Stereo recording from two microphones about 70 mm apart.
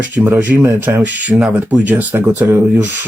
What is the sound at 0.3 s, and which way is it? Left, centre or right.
Speech, right.